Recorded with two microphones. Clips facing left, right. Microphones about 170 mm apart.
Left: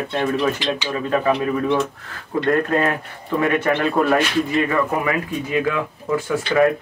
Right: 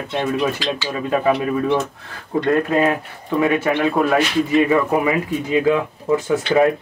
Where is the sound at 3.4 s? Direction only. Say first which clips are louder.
Right 1 dB; 5° right (ahead or behind).